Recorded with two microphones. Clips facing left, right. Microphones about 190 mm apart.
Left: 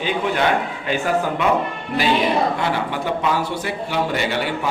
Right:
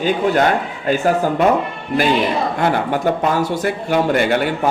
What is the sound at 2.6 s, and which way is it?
A man's voice, 50° right (ahead or behind).